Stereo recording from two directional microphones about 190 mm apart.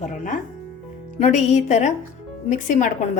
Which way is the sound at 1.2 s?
35° left (ahead or behind).